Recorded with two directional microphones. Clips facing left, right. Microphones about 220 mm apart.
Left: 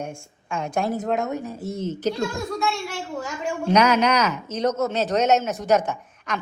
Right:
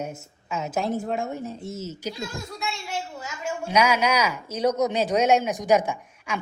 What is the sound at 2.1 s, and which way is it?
Speech, 80° left.